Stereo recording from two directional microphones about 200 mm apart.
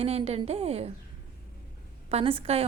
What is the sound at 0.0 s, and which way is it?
Speech, 30° right (ahead or behind).